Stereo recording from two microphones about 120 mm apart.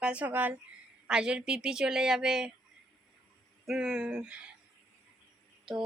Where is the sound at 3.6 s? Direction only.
5° right (ahead or behind).